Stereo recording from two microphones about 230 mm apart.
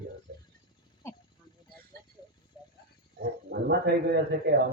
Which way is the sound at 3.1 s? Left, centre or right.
Right.